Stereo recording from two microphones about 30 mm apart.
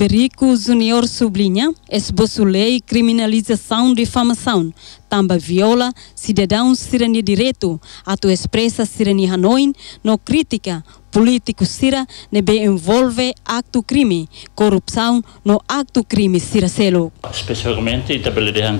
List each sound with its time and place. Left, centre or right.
0.0 s speech: right